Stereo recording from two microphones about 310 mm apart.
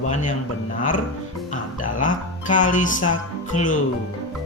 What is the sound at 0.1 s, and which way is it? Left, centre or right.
Speech, left.